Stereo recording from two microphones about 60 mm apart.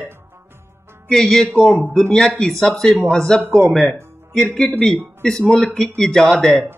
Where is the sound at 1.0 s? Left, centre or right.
Centre.